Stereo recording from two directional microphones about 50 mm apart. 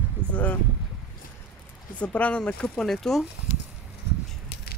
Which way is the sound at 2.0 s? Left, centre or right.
Left.